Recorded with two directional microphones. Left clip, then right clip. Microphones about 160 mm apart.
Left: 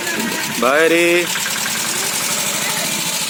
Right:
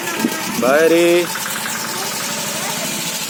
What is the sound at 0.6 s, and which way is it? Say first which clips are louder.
Speech: right 1 dB; centre (ahead or behind).